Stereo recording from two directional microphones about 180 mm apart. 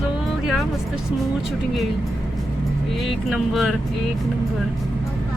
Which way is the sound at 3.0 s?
Centre (ahead or behind).